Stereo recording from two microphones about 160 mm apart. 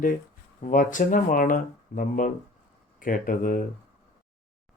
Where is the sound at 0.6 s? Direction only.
55° left (ahead or behind).